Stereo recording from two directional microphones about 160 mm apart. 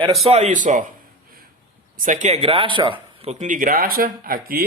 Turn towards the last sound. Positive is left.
turn(degrees=-65)  # may be behind; listen again after turning